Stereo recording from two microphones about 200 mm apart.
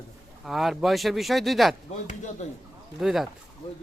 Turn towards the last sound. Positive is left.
turn(degrees=0)  # may be behind; listen again after turning